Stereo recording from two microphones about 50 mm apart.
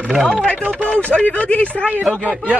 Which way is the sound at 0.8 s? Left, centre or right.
Left.